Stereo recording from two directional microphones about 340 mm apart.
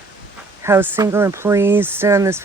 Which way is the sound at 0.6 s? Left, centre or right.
Centre.